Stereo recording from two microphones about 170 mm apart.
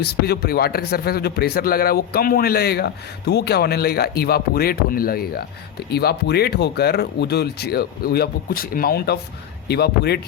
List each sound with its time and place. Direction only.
0.0 s a man's voice: 70° left (ahead or behind)